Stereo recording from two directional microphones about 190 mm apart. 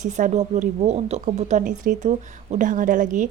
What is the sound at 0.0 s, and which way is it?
A woman's voice, 40° right (ahead or behind).